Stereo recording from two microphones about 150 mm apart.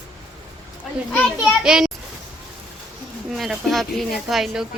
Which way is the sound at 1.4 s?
5° right (ahead or behind).